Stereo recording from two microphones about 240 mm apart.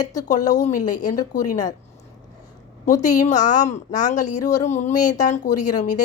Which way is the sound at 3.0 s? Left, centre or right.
Left.